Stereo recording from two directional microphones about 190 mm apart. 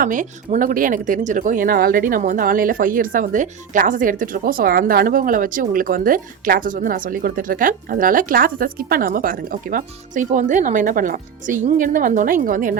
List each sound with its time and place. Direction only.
0.0 s speech: 45° right (ahead or behind)